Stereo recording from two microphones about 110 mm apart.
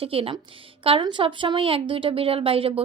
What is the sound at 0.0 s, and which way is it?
Speech, 60° right (ahead or behind).